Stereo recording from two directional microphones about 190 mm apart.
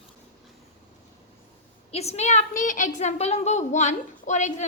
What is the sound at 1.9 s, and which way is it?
A woman's voice, 35° left (ahead or behind).